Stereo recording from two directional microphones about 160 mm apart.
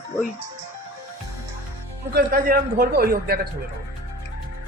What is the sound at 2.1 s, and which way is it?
A man's voice, 60° right (ahead or behind).